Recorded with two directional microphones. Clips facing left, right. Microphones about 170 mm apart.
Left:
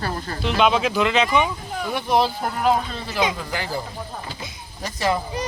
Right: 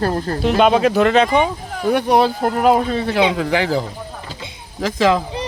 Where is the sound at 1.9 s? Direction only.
70° right (ahead or behind); by 2.7 s 55° right (ahead or behind).